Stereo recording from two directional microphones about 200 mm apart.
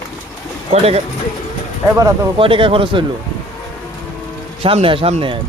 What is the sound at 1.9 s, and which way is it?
Speech, 15° right (ahead or behind).